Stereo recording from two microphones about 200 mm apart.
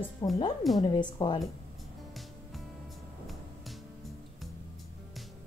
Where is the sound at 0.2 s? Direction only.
15° left (ahead or behind).